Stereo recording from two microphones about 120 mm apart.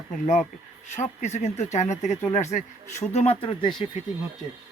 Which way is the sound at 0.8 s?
75° left (ahead or behind).